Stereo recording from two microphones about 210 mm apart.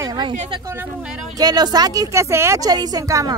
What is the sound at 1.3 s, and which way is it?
A woman's voice, 20° right (ahead or behind).